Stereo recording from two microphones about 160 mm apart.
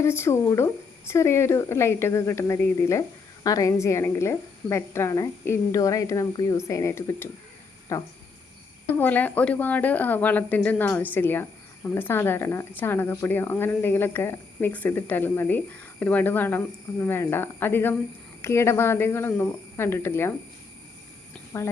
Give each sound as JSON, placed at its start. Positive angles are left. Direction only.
{"t": 0.0, "sound": "speech", "side_deg": 15}
{"t": 21.5, "sound": "speech", "side_deg": 20}